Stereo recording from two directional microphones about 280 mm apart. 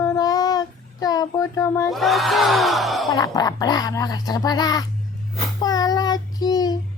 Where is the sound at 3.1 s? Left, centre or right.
Centre.